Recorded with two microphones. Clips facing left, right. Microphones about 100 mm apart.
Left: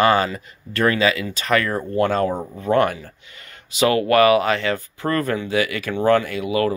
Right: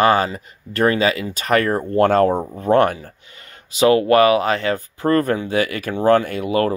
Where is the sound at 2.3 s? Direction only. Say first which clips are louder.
Right 5 dB; 25° right (ahead or behind).